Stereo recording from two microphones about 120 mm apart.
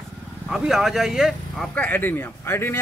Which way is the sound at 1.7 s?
15° left (ahead or behind).